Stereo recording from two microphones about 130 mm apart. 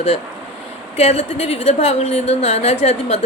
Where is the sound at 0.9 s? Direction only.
55° left (ahead or behind).